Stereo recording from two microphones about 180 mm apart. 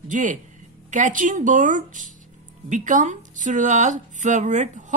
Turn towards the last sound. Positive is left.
turn(degrees=-45)  # may be behind; listen again after turning